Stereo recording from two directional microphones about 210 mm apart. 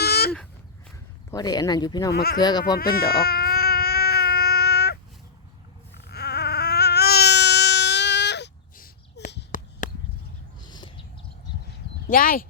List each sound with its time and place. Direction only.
0.0 s a sound: 50° left (ahead or behind)
1.3 s speech: 20° left (ahead or behind)
2.1 s speech: 45° left (ahead or behind)
2.4 s speech: 20° left (ahead or behind)
2.7 s baby cry: 45° left (ahead or behind)
6.1 s baby cry: 50° left (ahead or behind)
9.3 s a sound: 40° left (ahead or behind)
10.7 s a sound: 20° left (ahead or behind)
12.0 s speech: 45° left (ahead or behind)